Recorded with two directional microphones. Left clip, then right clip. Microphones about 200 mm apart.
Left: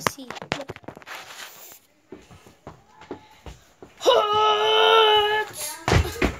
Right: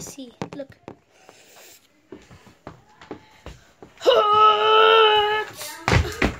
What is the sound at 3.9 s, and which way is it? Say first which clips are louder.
Wail: right 3 dB; 25° right (ahead or behind).